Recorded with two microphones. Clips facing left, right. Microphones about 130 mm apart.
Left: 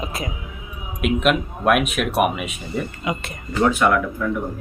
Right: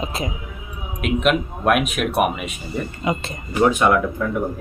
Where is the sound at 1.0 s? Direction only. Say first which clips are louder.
Even; centre (ahead or behind).